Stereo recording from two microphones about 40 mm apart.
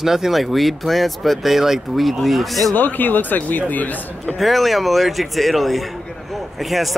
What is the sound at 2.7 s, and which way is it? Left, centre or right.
A man's voice, left.